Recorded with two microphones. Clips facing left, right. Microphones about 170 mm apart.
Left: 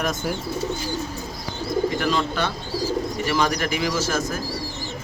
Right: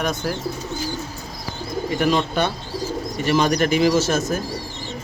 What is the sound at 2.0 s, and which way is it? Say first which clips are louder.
Speech: right 3 dB; 20° right (ahead or behind).